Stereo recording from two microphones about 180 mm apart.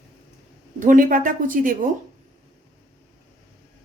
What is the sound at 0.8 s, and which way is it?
Speech, 45° right (ahead or behind).